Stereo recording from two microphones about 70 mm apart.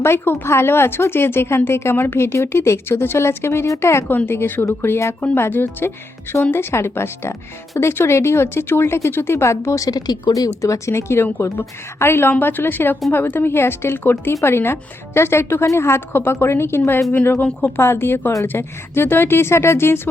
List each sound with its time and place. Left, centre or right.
0.0 s speech: left
5.2 s speech: left
10.6 s speech: left